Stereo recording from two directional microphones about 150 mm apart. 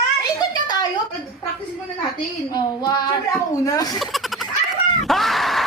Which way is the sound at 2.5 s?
30° left (ahead or behind).